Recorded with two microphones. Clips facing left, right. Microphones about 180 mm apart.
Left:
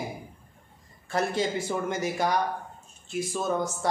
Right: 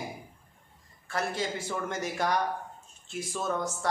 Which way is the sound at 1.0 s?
20° left (ahead or behind).